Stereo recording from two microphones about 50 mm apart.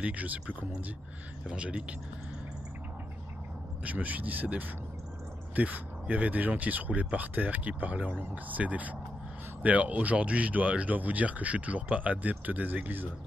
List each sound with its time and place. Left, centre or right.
0.0 s speech: right
1.4 s speech: centre
3.8 s speech: right